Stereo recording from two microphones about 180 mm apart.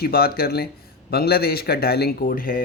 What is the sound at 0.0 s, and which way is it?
Speech, 55° left (ahead or behind).